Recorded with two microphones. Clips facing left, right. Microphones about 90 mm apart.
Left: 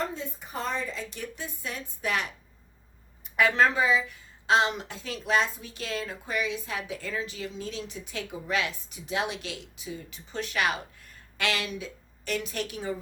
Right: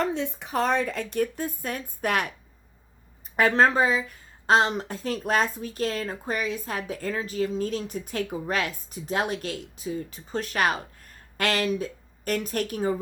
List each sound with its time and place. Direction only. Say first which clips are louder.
0.0 s a woman's voice: right 6 dB; 75° right (ahead or behind); by 2.3 s 55° right (ahead or behind)
3.3 s a woman's voice: right 3 dB; 40° right (ahead or behind)